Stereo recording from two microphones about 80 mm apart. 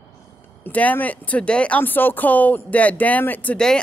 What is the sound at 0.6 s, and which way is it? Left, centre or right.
Speech, centre.